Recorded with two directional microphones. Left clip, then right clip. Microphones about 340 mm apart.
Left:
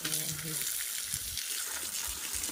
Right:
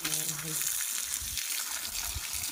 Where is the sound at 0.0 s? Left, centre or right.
Centre.